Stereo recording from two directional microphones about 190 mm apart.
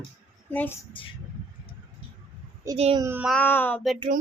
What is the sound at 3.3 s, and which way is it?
Speech, 10° left (ahead or behind).